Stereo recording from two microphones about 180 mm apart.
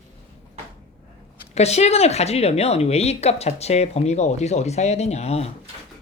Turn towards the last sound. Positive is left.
turn(degrees=35)  # may be behind; listen again after turning